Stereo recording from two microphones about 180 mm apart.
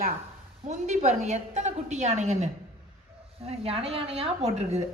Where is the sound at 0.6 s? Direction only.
40° right (ahead or behind).